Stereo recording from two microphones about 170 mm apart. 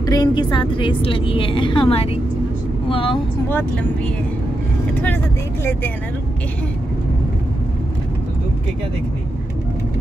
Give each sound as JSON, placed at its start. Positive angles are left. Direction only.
{"t": 0.0, "sound": "a woman's voice", "side_deg": 20}
{"t": 3.4, "sound": "speech", "side_deg": 10}